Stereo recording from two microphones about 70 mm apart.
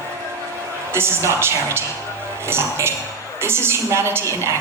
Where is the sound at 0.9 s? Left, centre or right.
Right.